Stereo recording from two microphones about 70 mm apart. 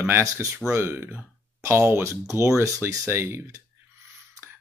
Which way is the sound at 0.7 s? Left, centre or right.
Right.